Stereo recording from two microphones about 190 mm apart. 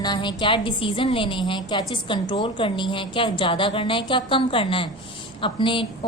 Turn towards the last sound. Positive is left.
turn(degrees=25)  # may be behind; listen again after turning